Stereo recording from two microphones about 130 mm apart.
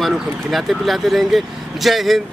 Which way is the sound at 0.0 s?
Centre (ahead or behind).